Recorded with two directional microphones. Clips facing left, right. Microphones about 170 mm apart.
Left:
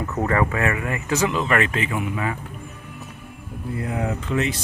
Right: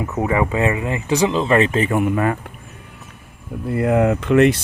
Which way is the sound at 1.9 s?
50° right (ahead or behind).